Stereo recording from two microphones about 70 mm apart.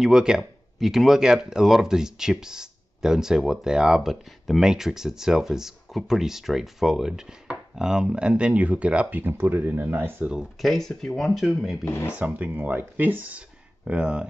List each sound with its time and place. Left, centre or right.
0.0 s speech: centre
9.2 s speech: right
10.6 s speech: centre
11.8 s speech: left
12.1 s speech: right